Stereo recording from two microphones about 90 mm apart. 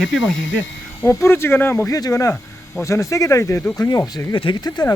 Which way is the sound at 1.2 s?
30° left (ahead or behind).